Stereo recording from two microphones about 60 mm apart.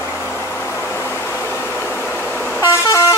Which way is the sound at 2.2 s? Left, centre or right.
Left.